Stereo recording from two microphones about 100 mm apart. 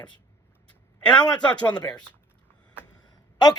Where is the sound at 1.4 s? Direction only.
10° left (ahead or behind).